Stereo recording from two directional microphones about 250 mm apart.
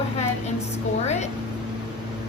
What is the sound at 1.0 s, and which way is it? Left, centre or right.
Speech, left.